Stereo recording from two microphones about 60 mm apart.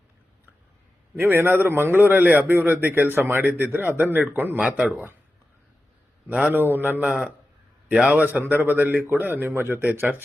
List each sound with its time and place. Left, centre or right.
1.1 s a man's voice: right
6.2 s a man's voice: right